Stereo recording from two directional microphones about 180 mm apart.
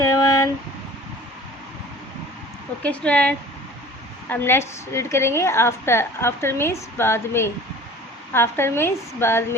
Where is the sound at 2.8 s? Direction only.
5° left (ahead or behind).